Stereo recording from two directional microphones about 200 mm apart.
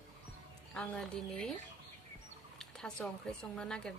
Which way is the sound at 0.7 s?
5° left (ahead or behind).